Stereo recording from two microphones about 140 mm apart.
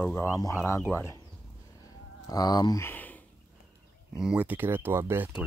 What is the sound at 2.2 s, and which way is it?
Speech, 25° left (ahead or behind).